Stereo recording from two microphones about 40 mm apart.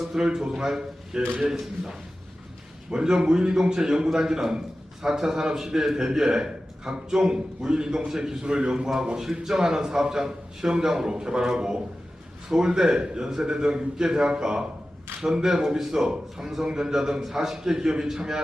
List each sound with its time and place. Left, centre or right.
0.0 s a sound: centre
0.3 s a man's voice: centre
2.9 s a man's voice: centre